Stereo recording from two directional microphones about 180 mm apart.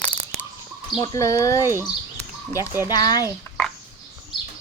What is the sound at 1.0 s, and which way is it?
Speech, 20° left (ahead or behind).